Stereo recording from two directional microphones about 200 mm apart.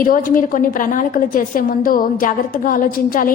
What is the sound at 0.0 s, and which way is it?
A woman's voice, 45° left (ahead or behind).